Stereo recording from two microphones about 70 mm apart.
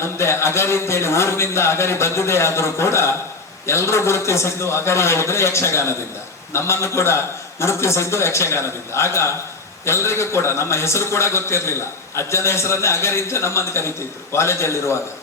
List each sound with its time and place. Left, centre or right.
0.0 s a man's voice: left